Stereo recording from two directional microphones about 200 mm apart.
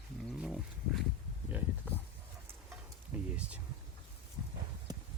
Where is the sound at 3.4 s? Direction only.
5° right (ahead or behind).